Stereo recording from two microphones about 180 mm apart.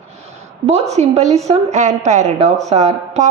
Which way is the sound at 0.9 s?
40° right (ahead or behind).